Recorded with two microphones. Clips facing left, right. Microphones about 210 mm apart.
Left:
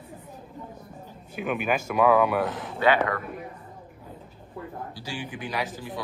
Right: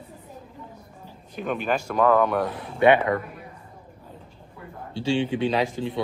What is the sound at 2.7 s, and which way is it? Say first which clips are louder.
Speech: right 5 dB; 25° right (ahead or behind).